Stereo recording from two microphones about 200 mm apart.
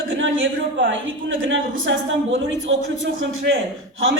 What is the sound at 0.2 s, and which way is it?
A woman's voice, 70° right (ahead or behind).